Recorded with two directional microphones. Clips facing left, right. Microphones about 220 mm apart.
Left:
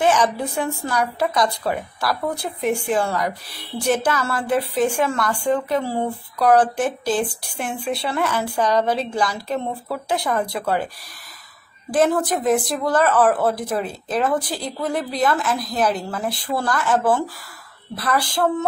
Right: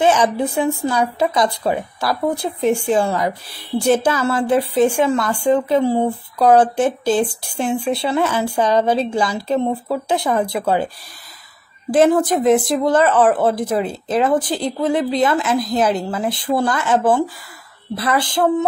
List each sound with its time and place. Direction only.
0.0 s speech: 25° right (ahead or behind)
11.9 s speech: 25° right (ahead or behind)